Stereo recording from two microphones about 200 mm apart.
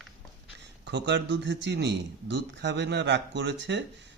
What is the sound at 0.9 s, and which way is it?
A man's voice, 60° right (ahead or behind).